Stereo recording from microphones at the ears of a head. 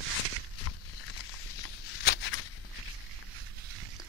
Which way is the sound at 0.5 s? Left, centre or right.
Left.